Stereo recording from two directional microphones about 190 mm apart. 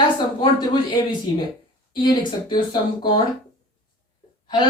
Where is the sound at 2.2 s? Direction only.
25° left (ahead or behind).